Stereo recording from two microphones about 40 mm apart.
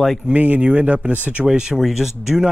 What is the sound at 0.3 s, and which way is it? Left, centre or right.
Speech, right.